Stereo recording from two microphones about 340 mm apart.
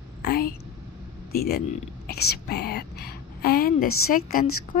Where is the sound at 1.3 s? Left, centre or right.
Left.